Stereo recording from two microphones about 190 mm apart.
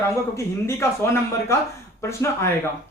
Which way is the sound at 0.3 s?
15° left (ahead or behind).